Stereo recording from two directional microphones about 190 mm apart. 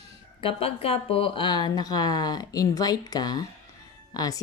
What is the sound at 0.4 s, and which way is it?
Speech, 30° left (ahead or behind).